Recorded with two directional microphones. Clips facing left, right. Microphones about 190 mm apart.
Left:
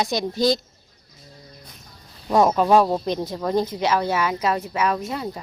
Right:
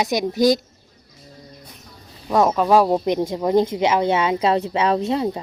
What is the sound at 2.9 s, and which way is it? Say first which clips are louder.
Speech: right 4 dB; 15° right (ahead or behind).